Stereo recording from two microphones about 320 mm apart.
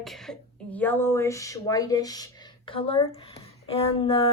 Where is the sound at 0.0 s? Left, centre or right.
Centre.